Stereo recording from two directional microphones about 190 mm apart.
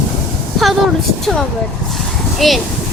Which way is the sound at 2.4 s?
Centre (ahead or behind).